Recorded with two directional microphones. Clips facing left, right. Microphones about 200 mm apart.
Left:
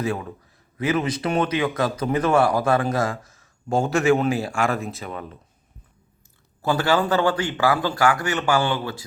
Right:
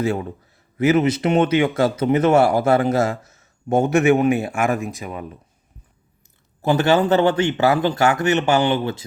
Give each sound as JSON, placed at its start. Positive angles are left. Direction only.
{"t": 0.0, "sound": "speech", "side_deg": -25}
{"t": 6.6, "sound": "speech", "side_deg": -20}